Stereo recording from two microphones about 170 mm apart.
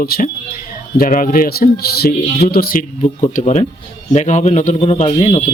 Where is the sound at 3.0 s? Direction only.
45° left (ahead or behind).